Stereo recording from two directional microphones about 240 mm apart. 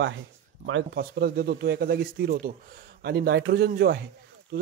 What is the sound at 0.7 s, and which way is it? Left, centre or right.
Speech, right.